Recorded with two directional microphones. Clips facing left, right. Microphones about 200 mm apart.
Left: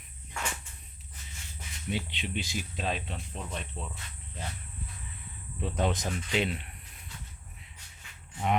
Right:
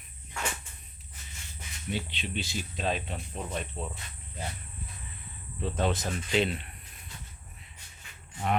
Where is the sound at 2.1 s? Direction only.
15° left (ahead or behind).